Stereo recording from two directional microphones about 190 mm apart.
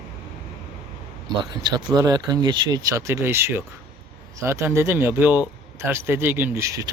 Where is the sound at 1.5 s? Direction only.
25° right (ahead or behind).